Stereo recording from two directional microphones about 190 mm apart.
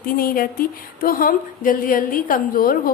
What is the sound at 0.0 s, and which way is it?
Speech, 50° left (ahead or behind).